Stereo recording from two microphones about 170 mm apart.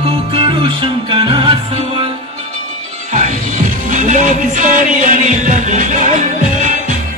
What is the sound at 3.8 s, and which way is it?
Music, 50° right (ahead or behind).